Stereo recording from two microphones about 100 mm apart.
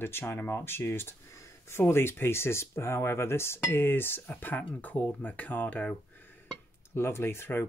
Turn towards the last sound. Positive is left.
turn(degrees=25)  # may be behind; listen again after turning